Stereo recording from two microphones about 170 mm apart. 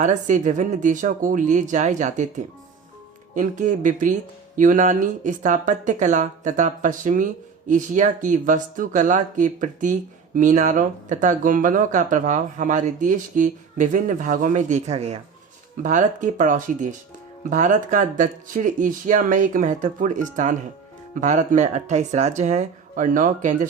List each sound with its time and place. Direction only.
0.0 s speech: 45° right (ahead or behind)